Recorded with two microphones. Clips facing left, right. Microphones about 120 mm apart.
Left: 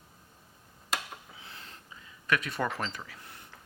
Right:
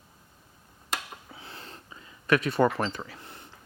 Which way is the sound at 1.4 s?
35° right (ahead or behind).